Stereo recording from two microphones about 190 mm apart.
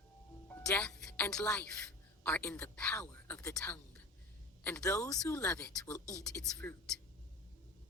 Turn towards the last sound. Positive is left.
turn(degrees=5)  # may be behind; listen again after turning